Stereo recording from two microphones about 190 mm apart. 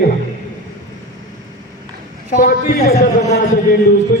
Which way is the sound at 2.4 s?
40° left (ahead or behind).